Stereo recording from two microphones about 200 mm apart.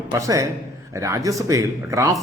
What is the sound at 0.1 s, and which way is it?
A man's voice, 15° right (ahead or behind).